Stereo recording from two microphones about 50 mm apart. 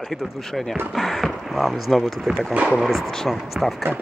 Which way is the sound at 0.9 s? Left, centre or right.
Centre.